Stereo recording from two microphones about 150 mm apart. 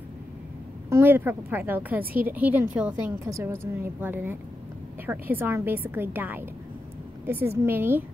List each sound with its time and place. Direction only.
0.8 s a woman's voice: 15° right (ahead or behind)